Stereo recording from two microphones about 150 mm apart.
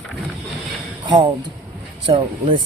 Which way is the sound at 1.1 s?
30° right (ahead or behind).